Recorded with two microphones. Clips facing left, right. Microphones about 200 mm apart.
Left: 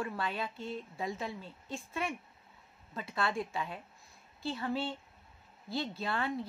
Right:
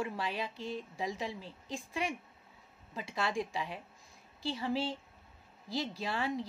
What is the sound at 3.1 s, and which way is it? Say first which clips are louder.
A woman's voice: even; 15° right (ahead or behind).